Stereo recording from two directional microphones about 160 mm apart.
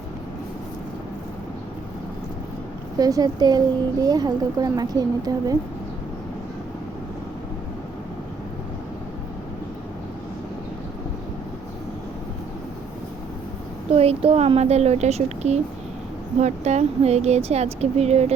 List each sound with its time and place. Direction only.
3.0 s a woman's voice: 25° right (ahead or behind)
13.9 s speech: 40° right (ahead or behind)